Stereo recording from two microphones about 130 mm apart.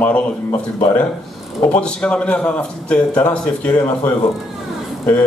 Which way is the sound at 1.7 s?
10° left (ahead or behind).